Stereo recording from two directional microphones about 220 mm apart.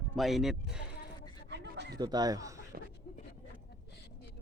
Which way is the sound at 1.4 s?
50° right (ahead or behind).